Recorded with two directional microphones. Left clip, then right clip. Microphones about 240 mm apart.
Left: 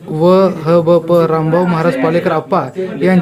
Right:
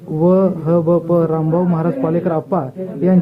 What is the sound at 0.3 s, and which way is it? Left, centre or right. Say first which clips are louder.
Speech: left 5 dB; centre.